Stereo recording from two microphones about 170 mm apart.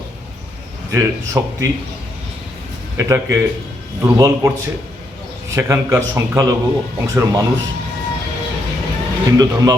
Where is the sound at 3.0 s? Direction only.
15° right (ahead or behind).